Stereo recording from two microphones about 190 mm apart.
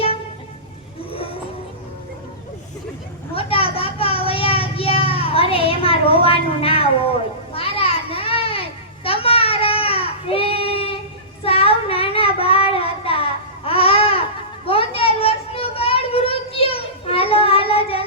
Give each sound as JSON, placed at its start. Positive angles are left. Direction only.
{"t": 1.1, "sound": "vehicle", "side_deg": 30}
{"t": 3.3, "sound": "a sound", "side_deg": 30}
{"t": 7.5, "sound": "children playing", "side_deg": 30}
{"t": 11.4, "sound": "child singing", "side_deg": 30}